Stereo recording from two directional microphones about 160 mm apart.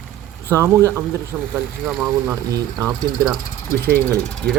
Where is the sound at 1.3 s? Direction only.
Centre (ahead or behind).